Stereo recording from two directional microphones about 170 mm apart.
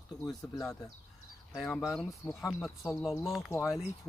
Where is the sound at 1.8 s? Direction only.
Centre (ahead or behind).